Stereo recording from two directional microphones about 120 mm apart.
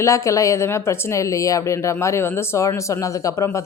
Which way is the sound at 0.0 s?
25° left (ahead or behind).